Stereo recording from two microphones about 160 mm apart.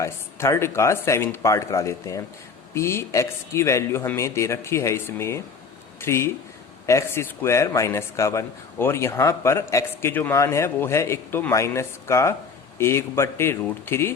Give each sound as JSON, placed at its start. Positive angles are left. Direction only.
{"t": 0.0, "sound": "a man's voice", "side_deg": 15}